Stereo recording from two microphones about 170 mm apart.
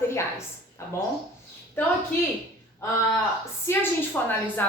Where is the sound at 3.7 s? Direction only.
15° left (ahead or behind).